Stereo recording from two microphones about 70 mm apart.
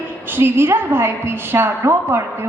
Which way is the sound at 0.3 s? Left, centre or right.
Right.